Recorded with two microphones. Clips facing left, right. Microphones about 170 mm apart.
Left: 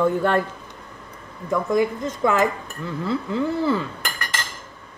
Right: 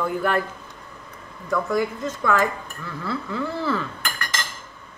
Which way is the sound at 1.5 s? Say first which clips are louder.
Left 3 dB; 20° left (ahead or behind).